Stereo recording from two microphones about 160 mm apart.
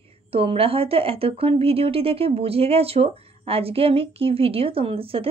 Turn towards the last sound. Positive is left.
turn(degrees=-35)  # may be behind; listen again after turning